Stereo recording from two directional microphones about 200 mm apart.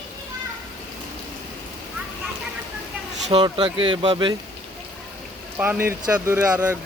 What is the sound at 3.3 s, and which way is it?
Speech, 25° right (ahead or behind).